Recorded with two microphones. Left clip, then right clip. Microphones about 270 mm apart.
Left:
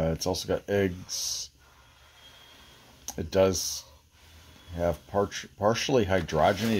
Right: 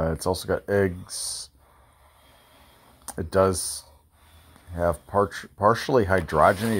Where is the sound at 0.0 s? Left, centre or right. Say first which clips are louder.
Right 3 dB; centre.